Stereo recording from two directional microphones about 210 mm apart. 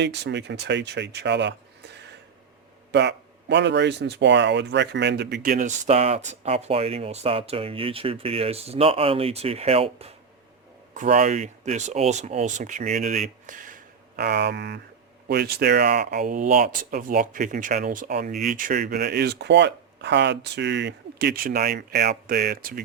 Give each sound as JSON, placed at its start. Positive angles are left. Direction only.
{"t": 0.0, "sound": "speech", "side_deg": -55}